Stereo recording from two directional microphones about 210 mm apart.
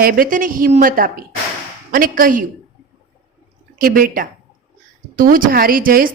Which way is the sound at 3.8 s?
45° right (ahead or behind).